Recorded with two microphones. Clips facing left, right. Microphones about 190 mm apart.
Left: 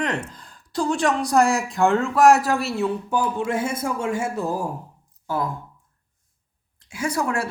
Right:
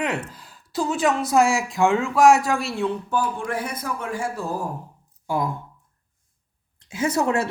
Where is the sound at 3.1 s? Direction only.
20° left (ahead or behind).